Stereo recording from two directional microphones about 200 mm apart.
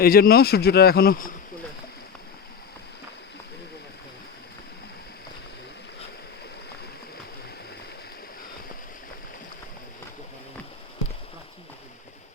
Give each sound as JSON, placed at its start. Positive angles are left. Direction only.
{"t": 0.0, "sound": "speech", "side_deg": 50}